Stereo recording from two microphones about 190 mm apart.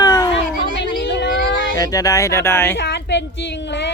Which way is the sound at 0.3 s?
70° left (ahead or behind).